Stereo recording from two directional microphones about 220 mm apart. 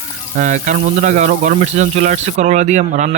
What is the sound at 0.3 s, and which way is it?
Speech, 35° right (ahead or behind).